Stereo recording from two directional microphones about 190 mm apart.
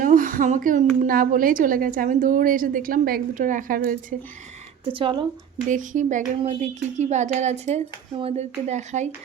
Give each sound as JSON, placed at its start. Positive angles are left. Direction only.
{"t": 0.0, "sound": "a sound", "side_deg": -45}
{"t": 0.9, "sound": "a woman's voice", "side_deg": -45}
{"t": 4.9, "sound": "speech", "side_deg": -25}
{"t": 5.6, "sound": "speech", "side_deg": -40}